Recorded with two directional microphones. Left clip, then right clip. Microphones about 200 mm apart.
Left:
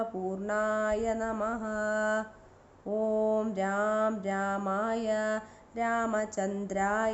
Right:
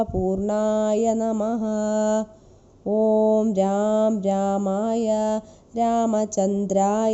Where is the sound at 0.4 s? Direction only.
40° right (ahead or behind).